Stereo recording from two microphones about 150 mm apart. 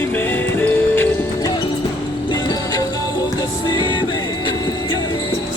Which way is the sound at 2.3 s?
25° left (ahead or behind).